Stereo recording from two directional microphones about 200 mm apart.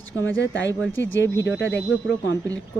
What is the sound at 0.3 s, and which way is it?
Speech, 70° left (ahead or behind).